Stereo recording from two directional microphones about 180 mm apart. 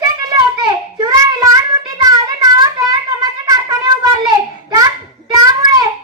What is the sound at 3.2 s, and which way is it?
Wind instrument, 20° right (ahead or behind).